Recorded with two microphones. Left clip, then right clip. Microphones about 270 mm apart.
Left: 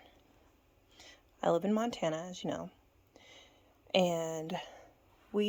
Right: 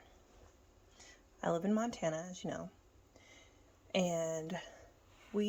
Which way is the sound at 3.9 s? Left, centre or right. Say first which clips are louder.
Left 4 dB; left.